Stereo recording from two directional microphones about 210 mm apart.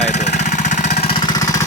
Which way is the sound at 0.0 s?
35° left (ahead or behind).